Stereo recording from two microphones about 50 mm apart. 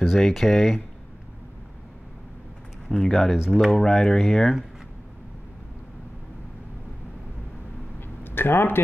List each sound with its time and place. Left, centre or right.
0.0 s speech: centre
2.9 s speech: centre
8.2 s speech: left